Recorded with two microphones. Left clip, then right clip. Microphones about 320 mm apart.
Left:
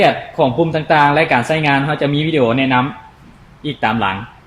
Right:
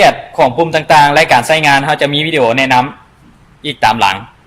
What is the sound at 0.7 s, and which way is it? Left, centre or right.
Speech, right.